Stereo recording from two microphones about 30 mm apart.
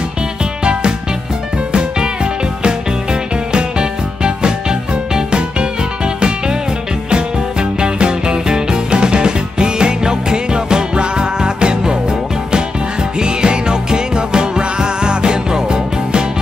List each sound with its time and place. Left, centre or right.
1.7 s music: right
7.8 s music: right